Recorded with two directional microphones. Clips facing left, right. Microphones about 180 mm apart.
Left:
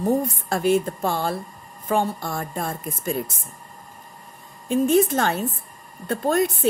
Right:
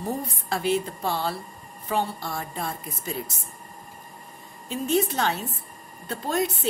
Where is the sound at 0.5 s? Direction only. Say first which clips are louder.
Left 4 dB; 50° left (ahead or behind).